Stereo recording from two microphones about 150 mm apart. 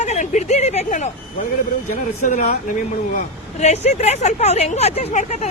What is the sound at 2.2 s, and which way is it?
Speech, 55° left (ahead or behind).